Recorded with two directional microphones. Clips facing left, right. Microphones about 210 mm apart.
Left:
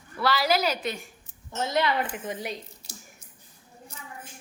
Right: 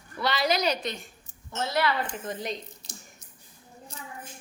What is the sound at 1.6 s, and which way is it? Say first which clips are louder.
A woman's voice: left 1 dB; 20° left (ahead or behind).